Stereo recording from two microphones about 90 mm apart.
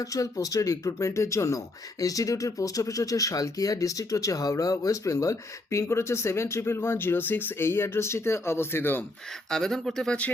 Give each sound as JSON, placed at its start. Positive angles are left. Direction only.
{"t": 0.0, "sound": "speech", "side_deg": 40}
{"t": 9.5, "sound": "speech", "side_deg": 5}